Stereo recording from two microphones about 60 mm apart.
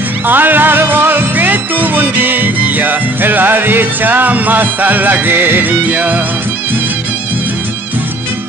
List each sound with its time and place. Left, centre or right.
0.3 s music: right